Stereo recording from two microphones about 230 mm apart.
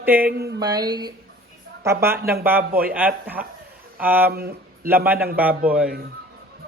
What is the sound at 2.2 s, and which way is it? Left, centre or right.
Speech, right.